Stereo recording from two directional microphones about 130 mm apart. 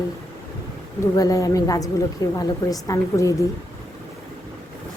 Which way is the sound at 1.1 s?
25° left (ahead or behind).